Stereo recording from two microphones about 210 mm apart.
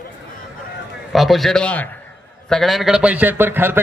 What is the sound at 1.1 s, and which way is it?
A man's voice, centre (ahead or behind).